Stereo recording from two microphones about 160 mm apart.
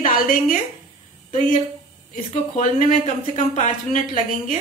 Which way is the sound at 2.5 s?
50° left (ahead or behind).